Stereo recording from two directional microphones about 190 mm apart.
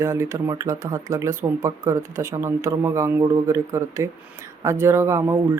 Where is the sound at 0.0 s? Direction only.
15° right (ahead or behind).